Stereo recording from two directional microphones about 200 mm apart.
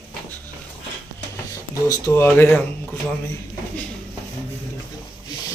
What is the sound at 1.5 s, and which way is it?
Speech, 15° left (ahead or behind).